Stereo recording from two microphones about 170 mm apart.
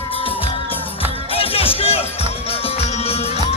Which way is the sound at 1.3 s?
35° left (ahead or behind).